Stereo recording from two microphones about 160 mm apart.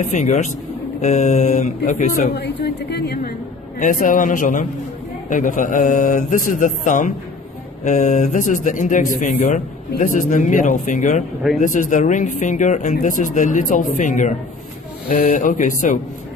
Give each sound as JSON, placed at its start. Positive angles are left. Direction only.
{"t": 0.1, "sound": "speech", "side_deg": 50}
{"t": 2.3, "sound": "speech", "side_deg": 90}
{"t": 3.8, "sound": "speech", "side_deg": 55}
{"t": 15.0, "sound": "speech", "side_deg": 60}